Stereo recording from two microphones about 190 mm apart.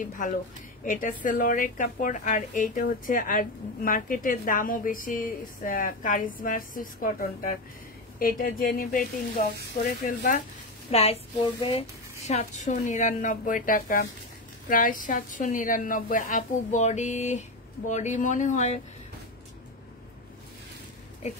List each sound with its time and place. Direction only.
0.8 s a woman's voice: 45° left (ahead or behind)
10.9 s speech: 30° left (ahead or behind)
12.3 s a woman's voice: 40° left (ahead or behind)